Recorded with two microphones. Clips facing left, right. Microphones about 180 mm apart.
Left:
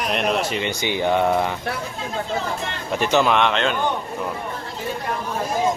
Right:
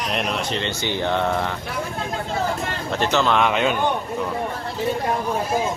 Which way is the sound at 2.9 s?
15° left (ahead or behind).